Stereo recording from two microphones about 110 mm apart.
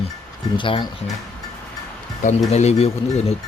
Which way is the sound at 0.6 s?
50° left (ahead or behind).